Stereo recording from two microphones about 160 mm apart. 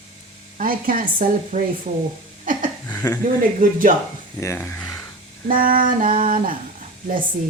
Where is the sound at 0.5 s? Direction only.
60° right (ahead or behind).